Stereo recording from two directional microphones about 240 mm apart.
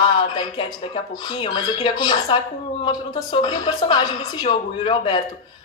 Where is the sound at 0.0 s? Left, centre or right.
Left.